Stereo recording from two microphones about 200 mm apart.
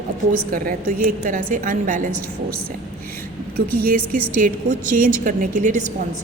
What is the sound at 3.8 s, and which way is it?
A woman's voice, 45° right (ahead or behind).